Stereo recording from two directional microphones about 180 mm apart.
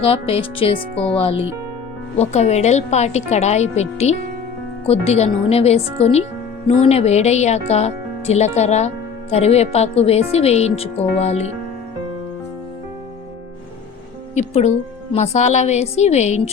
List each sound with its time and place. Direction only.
0.0 s speech: 30° left (ahead or behind)
2.1 s speech: 35° left (ahead or behind)
14.3 s speech: 40° left (ahead or behind)